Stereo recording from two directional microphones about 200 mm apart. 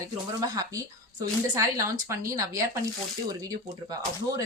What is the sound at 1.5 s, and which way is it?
Speech, 15° right (ahead or behind).